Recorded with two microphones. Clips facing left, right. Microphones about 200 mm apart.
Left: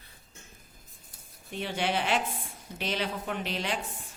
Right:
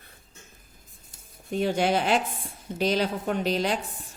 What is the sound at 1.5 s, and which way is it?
Speech, 40° right (ahead or behind).